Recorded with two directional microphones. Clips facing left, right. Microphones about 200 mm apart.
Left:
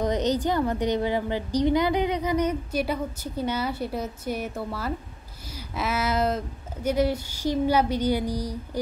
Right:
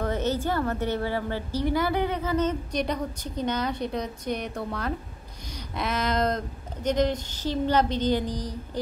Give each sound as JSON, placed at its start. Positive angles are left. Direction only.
{"t": 0.0, "sound": "a woman's voice", "side_deg": 15}